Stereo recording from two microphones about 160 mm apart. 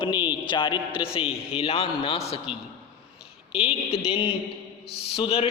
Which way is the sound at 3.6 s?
35° left (ahead or behind).